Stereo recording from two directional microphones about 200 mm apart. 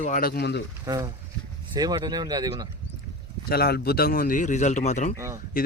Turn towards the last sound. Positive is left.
turn(degrees=-15)  # may be behind; listen again after turning